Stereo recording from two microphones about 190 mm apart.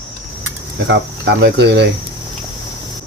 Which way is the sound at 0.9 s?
70° right (ahead or behind).